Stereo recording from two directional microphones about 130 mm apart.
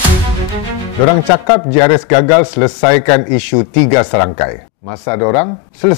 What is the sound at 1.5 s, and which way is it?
A man's voice, 15° left (ahead or behind).